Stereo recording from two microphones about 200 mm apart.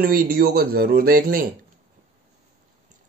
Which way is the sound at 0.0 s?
45° right (ahead or behind).